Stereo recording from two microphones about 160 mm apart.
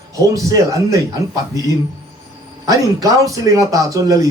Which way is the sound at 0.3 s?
20° right (ahead or behind).